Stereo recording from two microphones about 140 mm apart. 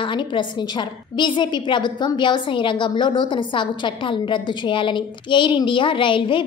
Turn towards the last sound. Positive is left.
turn(degrees=35)  # may be behind; listen again after turning